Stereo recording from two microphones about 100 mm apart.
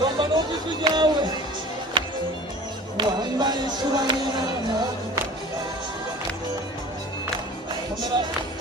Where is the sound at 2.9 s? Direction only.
45° right (ahead or behind).